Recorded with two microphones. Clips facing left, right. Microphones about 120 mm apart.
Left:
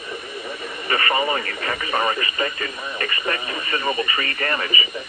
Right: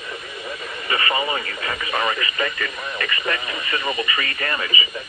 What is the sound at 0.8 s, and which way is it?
Speech, 40° left (ahead or behind).